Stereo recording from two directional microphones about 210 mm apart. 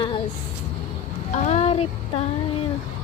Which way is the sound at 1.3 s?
35° left (ahead or behind).